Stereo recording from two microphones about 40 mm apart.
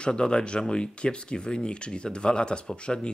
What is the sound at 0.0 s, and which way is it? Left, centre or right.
Speech, left.